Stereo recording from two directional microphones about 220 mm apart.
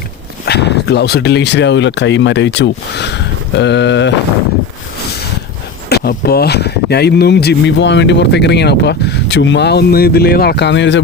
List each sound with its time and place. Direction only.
0.4 s speech: 50° left (ahead or behind)
5.9 s speech: 45° left (ahead or behind)